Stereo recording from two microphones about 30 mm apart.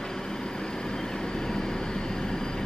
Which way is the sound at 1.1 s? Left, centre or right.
Left.